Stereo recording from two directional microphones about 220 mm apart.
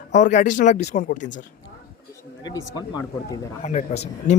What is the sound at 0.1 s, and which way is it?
Speech, 35° left (ahead or behind).